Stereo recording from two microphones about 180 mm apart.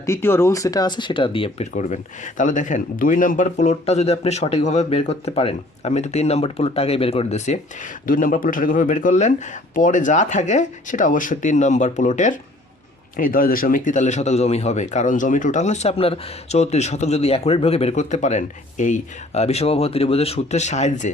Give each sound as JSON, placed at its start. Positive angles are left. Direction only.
{"t": 0.0, "sound": "a man's voice", "side_deg": 15}
{"t": 8.0, "sound": "a man's voice", "side_deg": 50}